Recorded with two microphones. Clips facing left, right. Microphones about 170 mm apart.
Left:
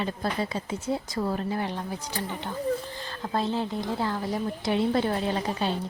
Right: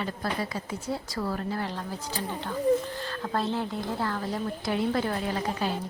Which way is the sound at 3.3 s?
15° left (ahead or behind).